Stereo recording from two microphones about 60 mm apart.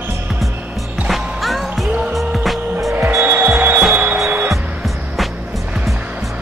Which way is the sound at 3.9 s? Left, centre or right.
Right.